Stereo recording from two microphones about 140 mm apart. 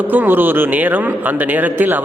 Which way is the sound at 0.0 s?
10° right (ahead or behind).